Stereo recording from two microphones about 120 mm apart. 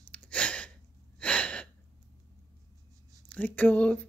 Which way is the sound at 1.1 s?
10° left (ahead or behind).